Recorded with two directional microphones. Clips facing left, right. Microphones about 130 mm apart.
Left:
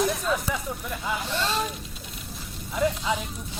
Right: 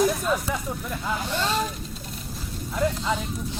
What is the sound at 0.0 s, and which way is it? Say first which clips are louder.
Speech: right 2 dB; centre (ahead or behind).